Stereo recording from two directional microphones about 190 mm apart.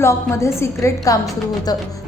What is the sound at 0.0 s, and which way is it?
A woman's voice, 15° left (ahead or behind).